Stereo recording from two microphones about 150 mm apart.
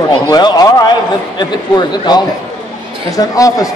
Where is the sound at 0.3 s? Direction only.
25° left (ahead or behind).